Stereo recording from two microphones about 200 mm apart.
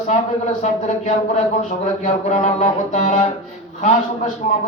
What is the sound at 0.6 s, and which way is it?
A man's voice, 35° left (ahead or behind).